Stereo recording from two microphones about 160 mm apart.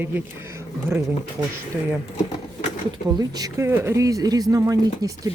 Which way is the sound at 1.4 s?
25° right (ahead or behind).